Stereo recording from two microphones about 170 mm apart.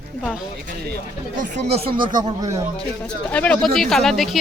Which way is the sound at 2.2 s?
20° right (ahead or behind).